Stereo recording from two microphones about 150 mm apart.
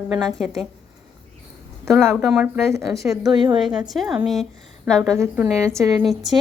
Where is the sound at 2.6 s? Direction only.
20° right (ahead or behind).